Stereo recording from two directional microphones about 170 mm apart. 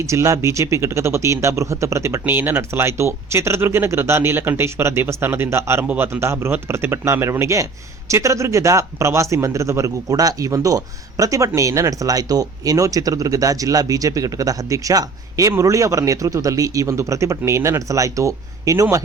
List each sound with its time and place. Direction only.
0.0 s speech: 15° right (ahead or behind)